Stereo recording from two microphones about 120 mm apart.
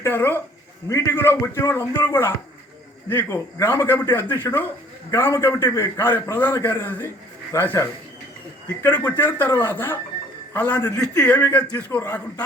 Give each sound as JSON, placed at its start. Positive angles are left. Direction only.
{"t": 0.0, "sound": "a man's voice", "side_deg": 15}